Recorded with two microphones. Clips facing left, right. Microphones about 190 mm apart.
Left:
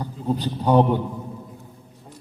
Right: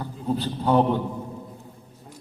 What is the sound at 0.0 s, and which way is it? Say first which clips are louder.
Speech: left 2 dB; 15° left (ahead or behind).